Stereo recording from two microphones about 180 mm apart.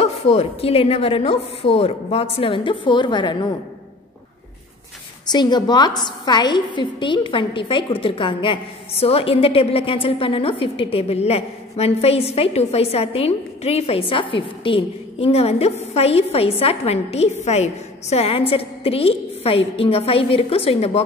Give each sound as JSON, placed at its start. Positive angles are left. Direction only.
{"t": 0.0, "sound": "a woman's voice", "side_deg": 35}
{"t": 5.3, "sound": "a woman's voice", "side_deg": 25}